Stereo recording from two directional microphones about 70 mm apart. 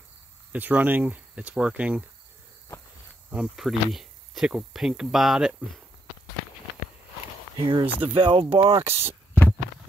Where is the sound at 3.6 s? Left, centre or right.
Centre.